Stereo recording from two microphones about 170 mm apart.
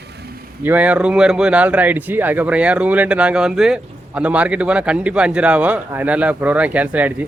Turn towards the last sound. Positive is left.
turn(degrees=-10)  # may be behind; listen again after turning